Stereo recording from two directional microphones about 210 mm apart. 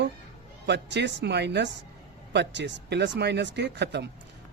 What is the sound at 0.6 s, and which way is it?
Speech, 55° right (ahead or behind).